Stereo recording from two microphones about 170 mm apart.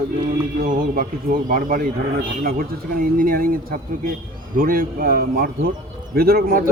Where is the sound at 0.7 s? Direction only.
55° right (ahead or behind).